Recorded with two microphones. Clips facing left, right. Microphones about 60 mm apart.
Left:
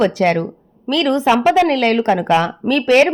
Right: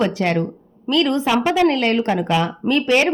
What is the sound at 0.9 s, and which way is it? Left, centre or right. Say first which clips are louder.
Speech: left 1 dB; left.